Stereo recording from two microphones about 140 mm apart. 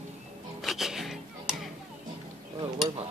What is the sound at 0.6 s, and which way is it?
Music, centre (ahead or behind).